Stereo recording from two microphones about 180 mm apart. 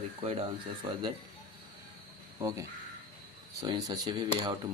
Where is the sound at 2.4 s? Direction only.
15° right (ahead or behind).